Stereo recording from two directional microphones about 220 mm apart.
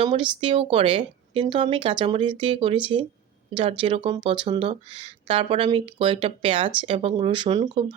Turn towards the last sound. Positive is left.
turn(degrees=-20)  # may be behind; listen again after turning